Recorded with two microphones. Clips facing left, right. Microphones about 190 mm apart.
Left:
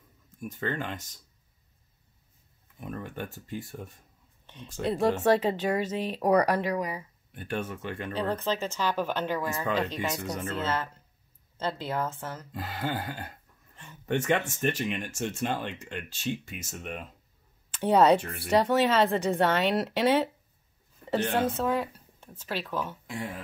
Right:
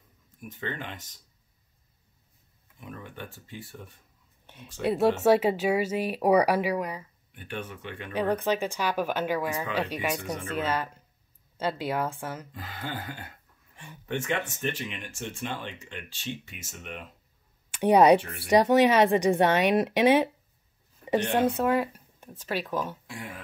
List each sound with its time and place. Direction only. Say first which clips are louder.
0.4 s speech: left 4 dB; 40° left (ahead or behind)
2.8 s speech: left 4 dB; 45° left (ahead or behind)
4.8 s speech: right 2 dB; 5° right (ahead or behind)
7.3 s speech: left 4 dB; 40° left (ahead or behind)
8.1 s speech: right 4 dB; 15° right (ahead or behind)
12.5 s speech: left 4 dB; 40° left (ahead or behind)
17.7 s speech: right 3 dB; 15° right (ahead or behind)